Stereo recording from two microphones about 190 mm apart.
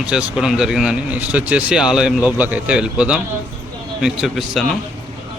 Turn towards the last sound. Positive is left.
turn(degrees=0)  # may be behind; listen again after turning